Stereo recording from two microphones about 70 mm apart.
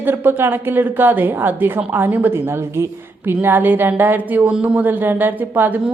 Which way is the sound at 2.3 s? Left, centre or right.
Right.